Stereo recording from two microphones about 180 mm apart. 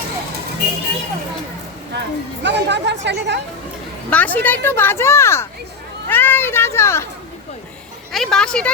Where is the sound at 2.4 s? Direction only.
75° right (ahead or behind).